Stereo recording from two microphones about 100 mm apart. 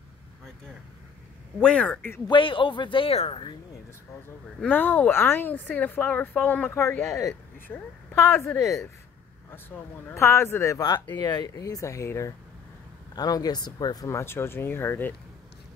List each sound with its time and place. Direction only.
1.6 s speech: 10° left (ahead or behind)
2.2 s speech: 55° left (ahead or behind)
4.6 s speech: 20° left (ahead or behind)
6.7 s a woman's voice: 25° left (ahead or behind)
10.1 s a woman's voice: 25° left (ahead or behind)
11.1 s speech: 45° left (ahead or behind); by 12.4 s 30° left (ahead or behind)
13.1 s speech: 40° left (ahead or behind)
14.0 s a woman's voice: 25° left (ahead or behind)